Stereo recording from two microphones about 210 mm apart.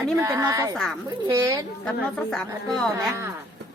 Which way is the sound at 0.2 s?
15° right (ahead or behind).